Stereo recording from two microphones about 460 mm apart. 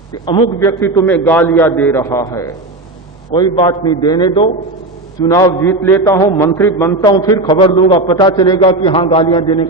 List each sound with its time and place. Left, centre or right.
0.1 s a man's voice: centre